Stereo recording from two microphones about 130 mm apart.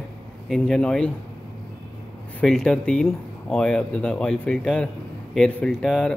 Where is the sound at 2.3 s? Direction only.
5° left (ahead or behind).